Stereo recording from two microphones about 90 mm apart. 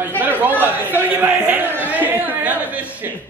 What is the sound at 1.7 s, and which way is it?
Chatter, 20° right (ahead or behind).